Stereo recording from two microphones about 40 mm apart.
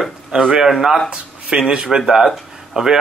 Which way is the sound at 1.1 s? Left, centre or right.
Right.